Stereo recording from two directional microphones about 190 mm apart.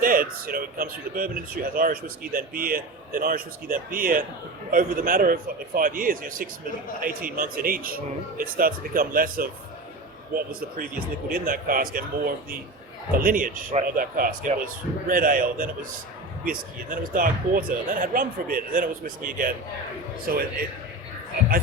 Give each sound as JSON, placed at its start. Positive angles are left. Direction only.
{"t": 0.0, "sound": "speech", "side_deg": -50}